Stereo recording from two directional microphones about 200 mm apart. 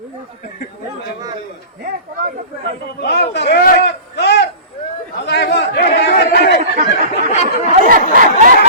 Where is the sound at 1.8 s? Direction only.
45° right (ahead or behind).